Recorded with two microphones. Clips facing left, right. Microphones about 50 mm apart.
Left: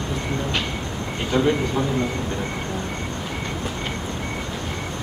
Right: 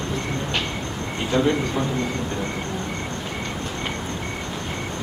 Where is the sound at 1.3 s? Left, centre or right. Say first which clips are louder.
Even; centre.